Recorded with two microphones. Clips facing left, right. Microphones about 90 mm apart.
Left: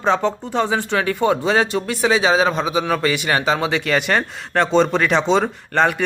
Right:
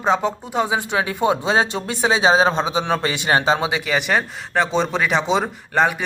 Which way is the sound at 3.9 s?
5° right (ahead or behind).